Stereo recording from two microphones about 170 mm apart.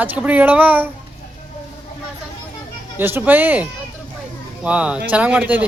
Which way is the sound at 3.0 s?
10° right (ahead or behind).